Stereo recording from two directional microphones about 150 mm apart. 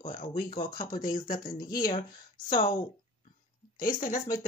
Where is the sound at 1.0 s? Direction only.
70° left (ahead or behind).